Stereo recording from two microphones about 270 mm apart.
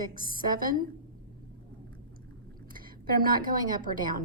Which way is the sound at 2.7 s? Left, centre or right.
Right.